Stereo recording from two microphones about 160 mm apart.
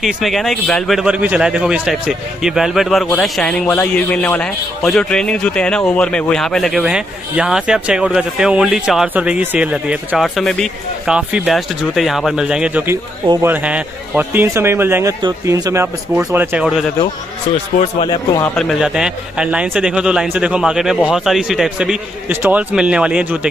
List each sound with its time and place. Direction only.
0.0 s a man's voice: centre (ahead or behind); by 16.4 s 15° right (ahead or behind)
16.5 s a man's voice: 5° right (ahead or behind)
18.0 s a man's voice: 25° left (ahead or behind)
18.4 s a man's voice: 5° left (ahead or behind)